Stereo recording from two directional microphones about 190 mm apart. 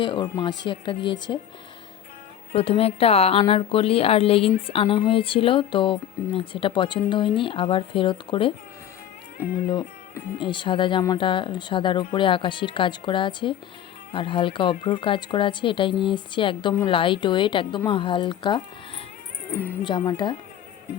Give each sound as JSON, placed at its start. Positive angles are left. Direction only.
{"t": 0.0, "sound": "speech", "side_deg": 25}
{"t": 2.5, "sound": "a woman's voice", "side_deg": 30}
{"t": 10.3, "sound": "speech", "side_deg": 25}